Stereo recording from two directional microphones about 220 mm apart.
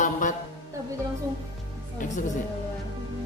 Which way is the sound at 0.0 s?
35° left (ahead or behind).